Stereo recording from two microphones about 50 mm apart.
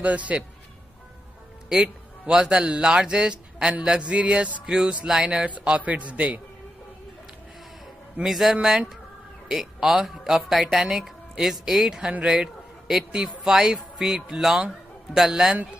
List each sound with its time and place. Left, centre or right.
0.0 s speech: right
1.7 s a man's voice: centre
8.3 s a man's voice: centre